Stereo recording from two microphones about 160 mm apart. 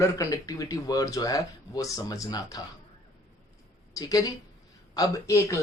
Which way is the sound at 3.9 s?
20° left (ahead or behind).